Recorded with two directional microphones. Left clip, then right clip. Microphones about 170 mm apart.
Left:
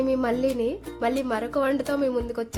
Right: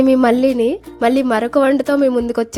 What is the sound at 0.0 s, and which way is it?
Speech, 55° right (ahead or behind).